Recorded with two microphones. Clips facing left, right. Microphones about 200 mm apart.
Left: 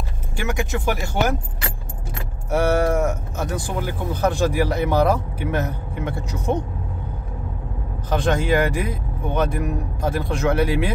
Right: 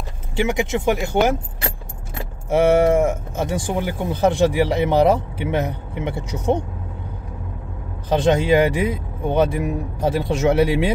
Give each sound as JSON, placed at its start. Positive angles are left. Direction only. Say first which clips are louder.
{"t": 0.4, "sound": "speech", "louder": "right 5 dB", "side_deg": -20}
{"t": 2.5, "sound": "speech", "louder": "right 4 dB", "side_deg": -25}
{"t": 8.1, "sound": "speech", "louder": "right 4 dB", "side_deg": -25}